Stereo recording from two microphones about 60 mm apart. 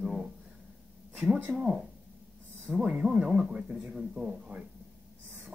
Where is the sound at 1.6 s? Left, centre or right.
Right.